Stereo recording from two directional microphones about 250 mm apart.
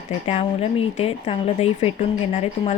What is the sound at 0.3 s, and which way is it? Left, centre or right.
Speech, left.